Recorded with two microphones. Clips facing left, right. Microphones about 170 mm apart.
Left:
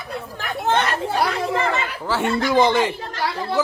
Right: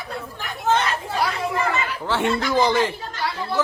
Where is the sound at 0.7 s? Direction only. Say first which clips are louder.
Left 1 dB; 60° left (ahead or behind).